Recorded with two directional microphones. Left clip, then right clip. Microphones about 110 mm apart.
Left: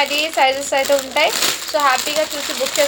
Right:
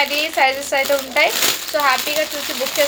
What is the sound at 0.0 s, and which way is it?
Speech, 25° left (ahead or behind).